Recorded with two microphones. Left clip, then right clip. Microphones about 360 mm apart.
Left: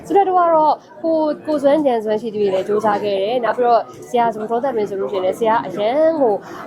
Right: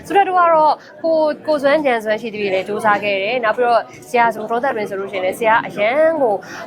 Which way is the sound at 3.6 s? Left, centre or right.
Centre.